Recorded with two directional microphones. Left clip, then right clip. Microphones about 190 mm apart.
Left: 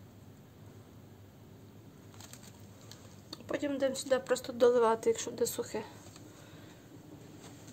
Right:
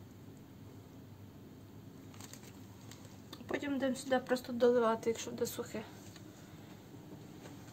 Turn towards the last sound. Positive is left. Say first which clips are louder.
# left 5 dB
turn(degrees=25)  # may be behind; listen again after turning